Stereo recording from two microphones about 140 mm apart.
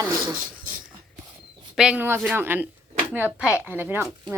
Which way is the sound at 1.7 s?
5° right (ahead or behind).